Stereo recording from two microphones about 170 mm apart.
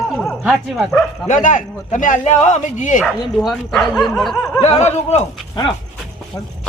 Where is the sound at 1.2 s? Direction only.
50° left (ahead or behind).